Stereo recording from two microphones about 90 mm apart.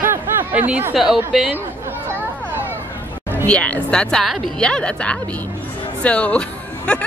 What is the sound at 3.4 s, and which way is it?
A woman's voice, 15° left (ahead or behind).